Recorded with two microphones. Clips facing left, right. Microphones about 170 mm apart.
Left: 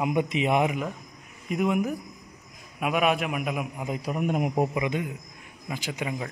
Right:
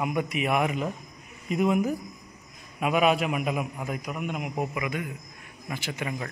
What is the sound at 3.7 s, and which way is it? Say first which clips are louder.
Speech: left 1 dB; 20° left (ahead or behind).